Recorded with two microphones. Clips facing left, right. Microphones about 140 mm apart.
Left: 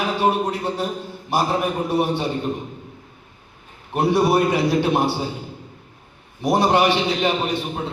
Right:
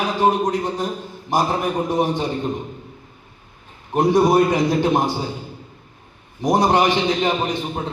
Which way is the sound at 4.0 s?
15° right (ahead or behind).